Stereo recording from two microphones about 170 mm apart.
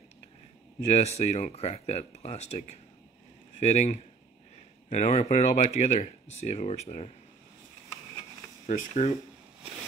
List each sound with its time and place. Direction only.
0.8 s speech: 40° left (ahead or behind)
8.6 s speech: 45° left (ahead or behind)